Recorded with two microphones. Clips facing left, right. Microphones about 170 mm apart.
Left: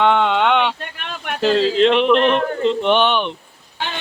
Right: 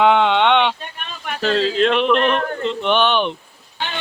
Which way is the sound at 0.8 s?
80° left.